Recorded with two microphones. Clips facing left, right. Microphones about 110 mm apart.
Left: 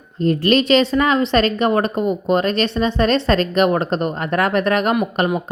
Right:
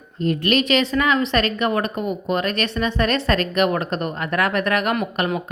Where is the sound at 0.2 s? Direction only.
35° left (ahead or behind).